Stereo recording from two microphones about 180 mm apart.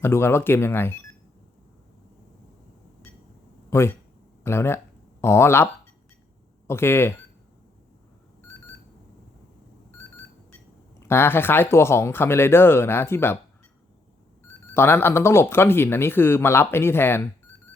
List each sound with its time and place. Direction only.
0.0 s speech: 15° left (ahead or behind)
3.7 s speech: 15° left (ahead or behind)
6.7 s speech: 15° left (ahead or behind)
11.0 s speech: 15° left (ahead or behind)
14.7 s speech: 15° left (ahead or behind)